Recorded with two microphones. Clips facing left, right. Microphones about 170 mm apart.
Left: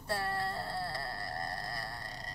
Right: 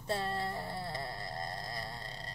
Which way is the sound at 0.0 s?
20° right (ahead or behind).